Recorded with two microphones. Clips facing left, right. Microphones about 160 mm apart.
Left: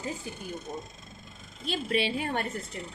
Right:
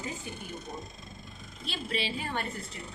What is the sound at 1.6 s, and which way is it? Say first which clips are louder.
Speech: left 6 dB; 50° left (ahead or behind).